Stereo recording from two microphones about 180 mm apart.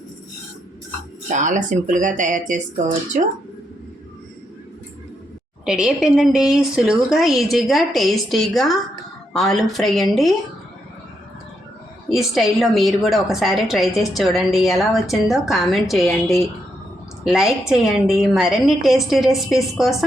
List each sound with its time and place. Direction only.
1.3 s speech: 45° right (ahead or behind)
5.6 s a woman's voice: 5° right (ahead or behind)
12.0 s a woman's voice: centre (ahead or behind)